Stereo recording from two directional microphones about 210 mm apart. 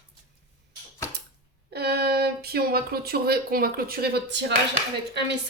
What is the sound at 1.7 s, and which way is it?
Speech, 50° right (ahead or behind).